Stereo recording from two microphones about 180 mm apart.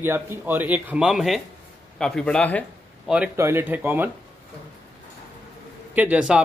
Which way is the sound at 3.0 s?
5° right (ahead or behind).